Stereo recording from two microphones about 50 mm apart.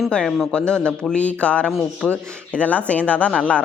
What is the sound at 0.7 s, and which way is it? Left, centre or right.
A woman's voice, centre.